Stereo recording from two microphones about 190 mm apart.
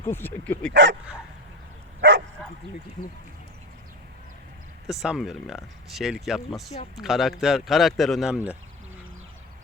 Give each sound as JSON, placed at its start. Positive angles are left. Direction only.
{"t": 0.1, "sound": "speech", "side_deg": 10}
{"t": 0.7, "sound": "speech", "side_deg": -70}
{"t": 2.0, "sound": "speech", "side_deg": -70}
{"t": 4.9, "sound": "speech", "side_deg": 0}